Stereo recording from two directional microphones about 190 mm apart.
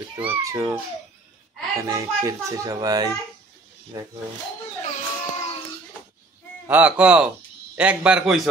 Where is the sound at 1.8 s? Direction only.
15° right (ahead or behind).